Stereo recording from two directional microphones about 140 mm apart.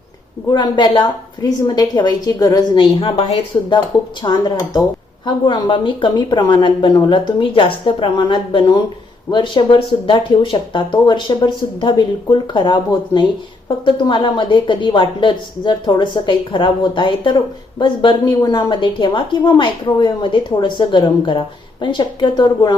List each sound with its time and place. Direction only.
0.5 s a woman's voice: 35° left (ahead or behind)